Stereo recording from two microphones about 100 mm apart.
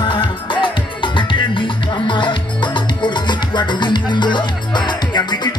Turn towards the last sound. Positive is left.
turn(degrees=45)  # may be behind; listen again after turning